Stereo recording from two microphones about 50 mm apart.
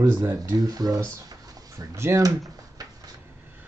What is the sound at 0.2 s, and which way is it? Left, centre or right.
Speech, right.